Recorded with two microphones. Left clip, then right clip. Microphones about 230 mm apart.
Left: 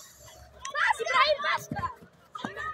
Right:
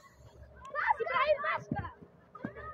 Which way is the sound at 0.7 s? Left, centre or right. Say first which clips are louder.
Left 5 dB; left.